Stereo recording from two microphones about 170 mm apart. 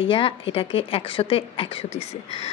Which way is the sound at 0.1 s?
30° left (ahead or behind).